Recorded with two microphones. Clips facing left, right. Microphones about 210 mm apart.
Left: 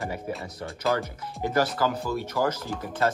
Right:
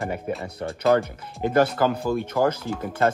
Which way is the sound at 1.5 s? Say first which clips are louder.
Right 5 dB; 55° right (ahead or behind).